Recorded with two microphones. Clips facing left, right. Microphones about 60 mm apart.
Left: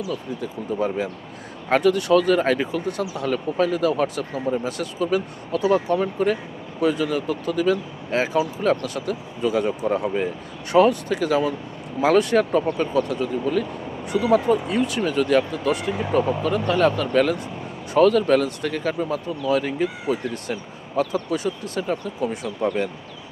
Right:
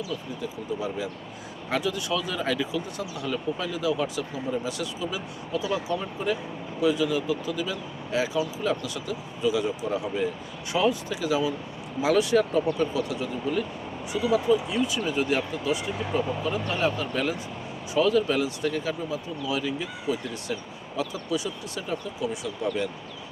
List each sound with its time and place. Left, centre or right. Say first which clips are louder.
0.1 s speech: left 4 dB; left
8.4 s speech: left 6 dB; left